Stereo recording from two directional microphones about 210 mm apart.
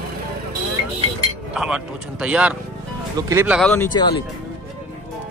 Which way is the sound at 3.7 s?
15° left (ahead or behind).